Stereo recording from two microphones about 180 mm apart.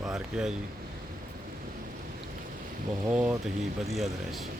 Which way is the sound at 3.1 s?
5° right (ahead or behind).